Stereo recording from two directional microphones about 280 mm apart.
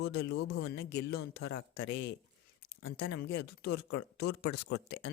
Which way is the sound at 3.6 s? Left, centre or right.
Left.